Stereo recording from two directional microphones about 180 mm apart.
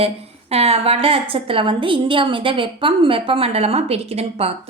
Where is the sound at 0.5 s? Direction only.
35° right (ahead or behind).